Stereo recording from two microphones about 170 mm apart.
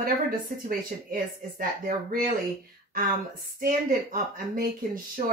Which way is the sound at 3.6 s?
55° right (ahead or behind).